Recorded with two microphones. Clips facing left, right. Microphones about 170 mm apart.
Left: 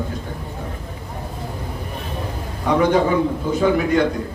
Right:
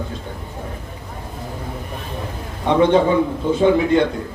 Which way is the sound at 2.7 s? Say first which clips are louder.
Right 2 dB; 25° right (ahead or behind).